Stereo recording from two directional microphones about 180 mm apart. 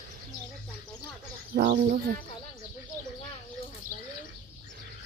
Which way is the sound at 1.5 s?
55° right (ahead or behind).